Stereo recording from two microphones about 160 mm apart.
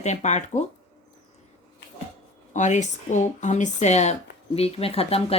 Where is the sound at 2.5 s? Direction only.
50° left (ahead or behind).